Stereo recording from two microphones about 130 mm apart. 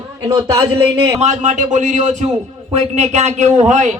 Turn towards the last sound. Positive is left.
turn(degrees=-65)  # may be behind; listen again after turning